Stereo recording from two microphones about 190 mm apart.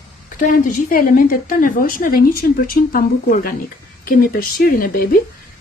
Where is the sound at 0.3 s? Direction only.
45° left (ahead or behind).